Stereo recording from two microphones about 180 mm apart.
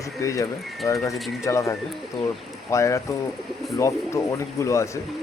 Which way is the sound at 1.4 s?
15° left (ahead or behind).